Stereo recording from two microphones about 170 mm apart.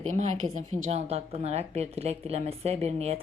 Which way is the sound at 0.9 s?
40° right (ahead or behind).